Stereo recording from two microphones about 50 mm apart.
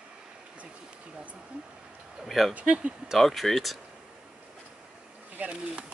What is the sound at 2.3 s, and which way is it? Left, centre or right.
Speech, centre.